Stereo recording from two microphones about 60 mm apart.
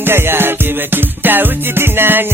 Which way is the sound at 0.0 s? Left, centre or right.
Right.